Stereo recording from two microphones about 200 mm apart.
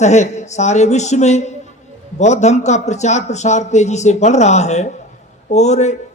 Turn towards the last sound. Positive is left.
turn(degrees=35)  # may be behind; listen again after turning